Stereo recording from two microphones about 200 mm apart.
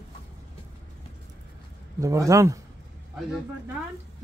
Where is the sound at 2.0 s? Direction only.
15° right (ahead or behind).